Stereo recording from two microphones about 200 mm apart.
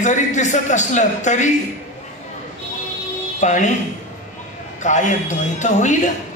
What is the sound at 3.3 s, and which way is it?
Speech, 35° left (ahead or behind).